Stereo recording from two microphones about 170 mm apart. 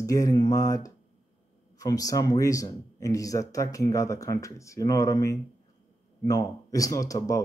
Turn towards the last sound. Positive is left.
turn(degrees=20)  # may be behind; listen again after turning